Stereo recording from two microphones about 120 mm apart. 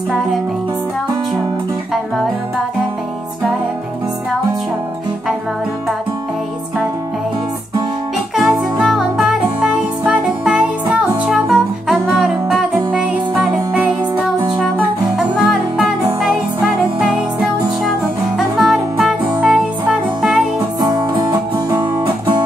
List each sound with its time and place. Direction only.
8.4 s music: centre (ahead or behind)
15.1 s music: centre (ahead or behind)
20.8 s music: 35° right (ahead or behind)